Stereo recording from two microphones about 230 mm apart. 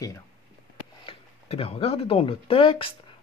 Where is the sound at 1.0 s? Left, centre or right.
Left.